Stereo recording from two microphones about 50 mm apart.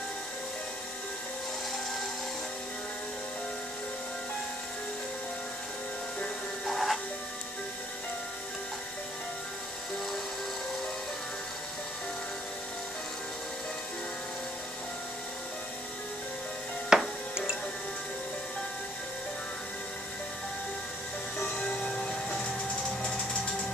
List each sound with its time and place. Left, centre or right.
6.6 s music: centre
16.9 s music: centre
21.6 s music: centre